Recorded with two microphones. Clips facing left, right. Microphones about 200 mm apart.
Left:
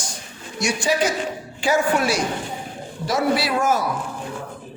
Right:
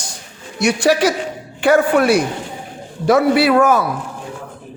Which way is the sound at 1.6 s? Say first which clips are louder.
Right 7 dB; 60° right (ahead or behind).